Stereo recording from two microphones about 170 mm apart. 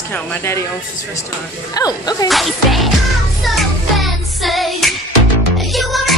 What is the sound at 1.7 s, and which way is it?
Speech, 20° left (ahead or behind).